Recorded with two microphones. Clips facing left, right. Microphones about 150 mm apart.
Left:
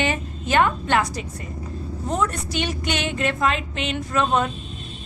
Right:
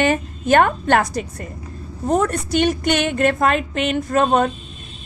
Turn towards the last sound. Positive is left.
turn(degrees=-45)  # may be behind; listen again after turning